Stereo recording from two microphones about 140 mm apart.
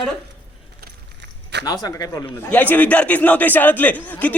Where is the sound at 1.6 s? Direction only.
25° left (ahead or behind).